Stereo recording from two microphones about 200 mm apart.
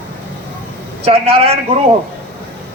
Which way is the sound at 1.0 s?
30° right (ahead or behind).